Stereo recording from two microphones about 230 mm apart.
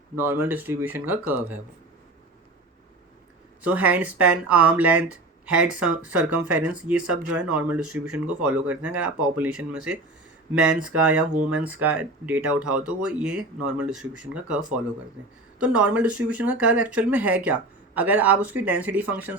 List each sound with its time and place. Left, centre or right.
0.2 s speech: centre
3.6 s speech: centre